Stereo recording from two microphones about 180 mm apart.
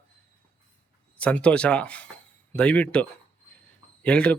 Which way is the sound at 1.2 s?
5° left (ahead or behind).